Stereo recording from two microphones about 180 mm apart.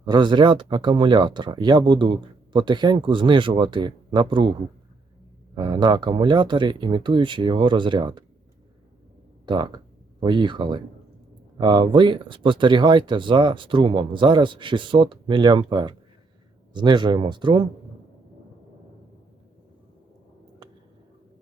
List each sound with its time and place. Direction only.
0.0 s speech: 25° right (ahead or behind)
5.5 s speech: 25° right (ahead or behind)
9.5 s speech: 25° right (ahead or behind)